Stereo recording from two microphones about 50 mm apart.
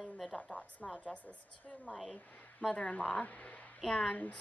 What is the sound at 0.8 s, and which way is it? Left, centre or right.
Speech, centre.